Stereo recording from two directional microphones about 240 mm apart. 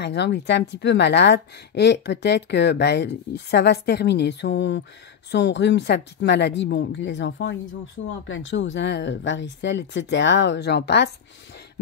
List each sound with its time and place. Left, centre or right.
0.0 s a woman's voice: left